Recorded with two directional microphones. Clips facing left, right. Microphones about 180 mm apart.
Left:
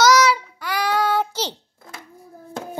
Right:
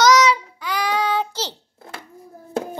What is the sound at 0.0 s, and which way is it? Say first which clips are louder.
Child singing: right 1 dB; 10° left (ahead or behind).